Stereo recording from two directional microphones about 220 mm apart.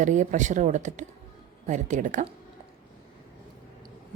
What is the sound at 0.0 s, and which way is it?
A woman's voice, 35° right (ahead or behind).